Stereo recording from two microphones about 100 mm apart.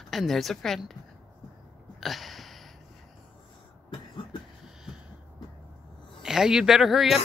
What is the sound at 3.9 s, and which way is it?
Cough, 50° left (ahead or behind).